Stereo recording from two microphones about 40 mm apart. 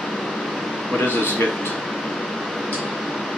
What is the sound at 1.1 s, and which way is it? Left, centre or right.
Speech, left.